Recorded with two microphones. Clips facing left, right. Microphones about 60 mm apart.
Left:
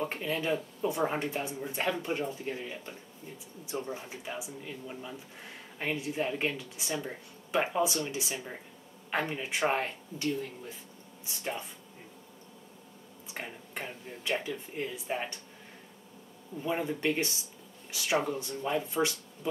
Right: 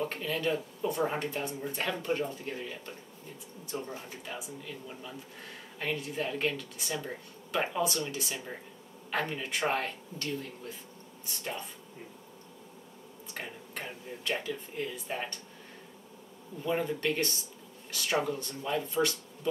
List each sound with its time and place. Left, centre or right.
0.0 s speech: centre
13.3 s speech: centre
16.6 s speech: centre
18.1 s speech: centre
18.4 s speech: centre